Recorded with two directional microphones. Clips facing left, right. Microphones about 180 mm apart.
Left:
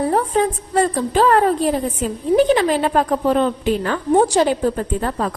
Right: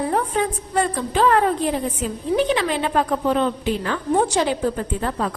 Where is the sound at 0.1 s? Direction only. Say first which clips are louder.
Left 4 dB; 35° left (ahead or behind).